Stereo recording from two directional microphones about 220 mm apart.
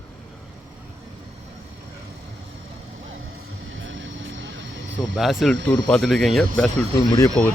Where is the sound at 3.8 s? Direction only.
60° right (ahead or behind).